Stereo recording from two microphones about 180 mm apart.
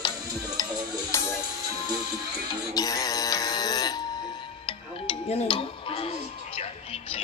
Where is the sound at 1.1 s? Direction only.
15° left (ahead or behind).